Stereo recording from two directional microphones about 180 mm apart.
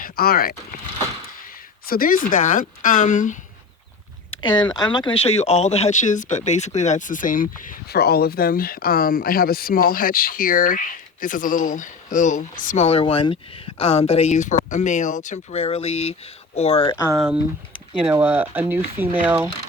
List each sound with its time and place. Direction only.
0.0 s speech: 55° left (ahead or behind)
1.9 s speech: 50° left (ahead or behind)
4.3 s speech: 25° left (ahead or behind); by 7.4 s 45° left (ahead or behind)
7.9 s speech: 60° left (ahead or behind); by 16.9 s 35° left (ahead or behind)
17.2 s speech: 5° right (ahead or behind)